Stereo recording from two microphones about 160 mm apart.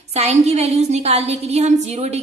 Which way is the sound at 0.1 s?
40° right (ahead or behind).